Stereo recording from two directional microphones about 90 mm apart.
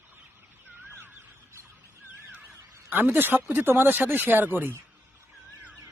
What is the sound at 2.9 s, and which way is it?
Speech, 20° right (ahead or behind).